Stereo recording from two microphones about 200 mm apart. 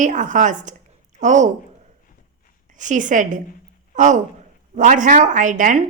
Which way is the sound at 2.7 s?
40° right (ahead or behind).